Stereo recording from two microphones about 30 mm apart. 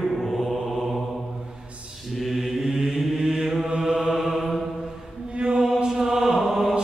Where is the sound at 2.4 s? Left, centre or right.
Centre.